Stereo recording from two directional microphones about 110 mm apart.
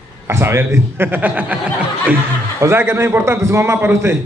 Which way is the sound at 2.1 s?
25° right (ahead or behind).